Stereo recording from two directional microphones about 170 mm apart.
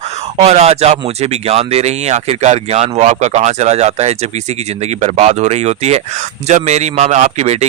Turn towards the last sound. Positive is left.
turn(degrees=-40)  # may be behind; listen again after turning